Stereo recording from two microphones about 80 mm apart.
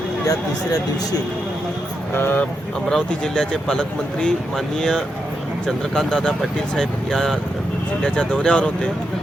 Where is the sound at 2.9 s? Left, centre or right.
Centre.